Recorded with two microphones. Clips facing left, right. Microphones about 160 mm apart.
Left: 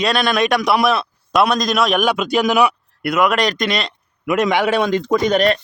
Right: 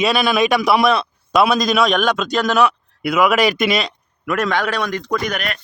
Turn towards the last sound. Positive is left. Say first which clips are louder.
# left 8 dB
turn(degrees=30)  # may be behind; listen again after turning